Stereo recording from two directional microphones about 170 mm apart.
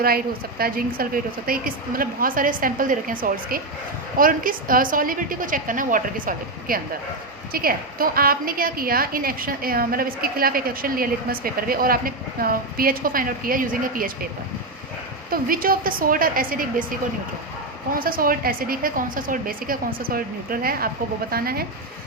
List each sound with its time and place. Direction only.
0.6 s a woman's voice: 60° right (ahead or behind)
15.3 s a woman's voice: 55° right (ahead or behind)
17.9 s a woman's voice: 55° right (ahead or behind)